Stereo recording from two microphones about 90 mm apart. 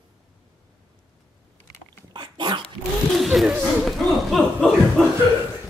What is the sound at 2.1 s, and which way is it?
Dog, 60° right (ahead or behind).